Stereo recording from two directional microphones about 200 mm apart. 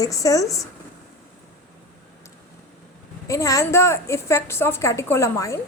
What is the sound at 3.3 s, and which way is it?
A woman's voice, 15° left (ahead or behind).